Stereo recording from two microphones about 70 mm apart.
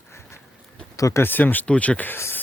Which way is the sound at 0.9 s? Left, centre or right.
Left.